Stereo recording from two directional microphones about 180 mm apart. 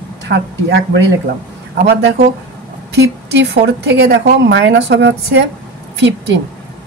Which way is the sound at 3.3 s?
75° right (ahead or behind).